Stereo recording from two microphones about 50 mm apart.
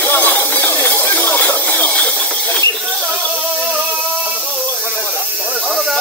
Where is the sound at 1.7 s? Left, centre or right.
Left.